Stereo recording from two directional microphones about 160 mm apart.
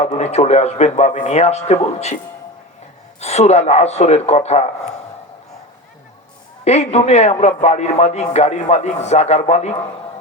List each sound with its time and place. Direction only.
0.0 s a man's voice: 40° left (ahead or behind)
3.2 s a man's voice: 45° left (ahead or behind)
6.7 s a man's voice: 45° left (ahead or behind)